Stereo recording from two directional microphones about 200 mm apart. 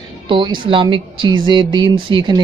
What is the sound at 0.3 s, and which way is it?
Speech, 25° right (ahead or behind).